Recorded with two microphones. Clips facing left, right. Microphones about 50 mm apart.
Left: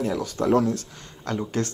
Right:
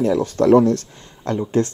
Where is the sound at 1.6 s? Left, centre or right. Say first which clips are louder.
Right 9 dB; right.